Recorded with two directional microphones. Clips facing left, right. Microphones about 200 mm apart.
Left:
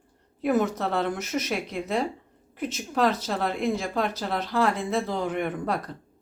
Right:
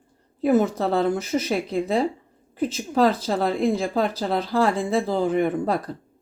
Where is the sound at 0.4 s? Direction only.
30° right (ahead or behind).